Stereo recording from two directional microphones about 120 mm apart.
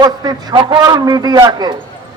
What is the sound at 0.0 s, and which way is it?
A man's voice, 35° right (ahead or behind).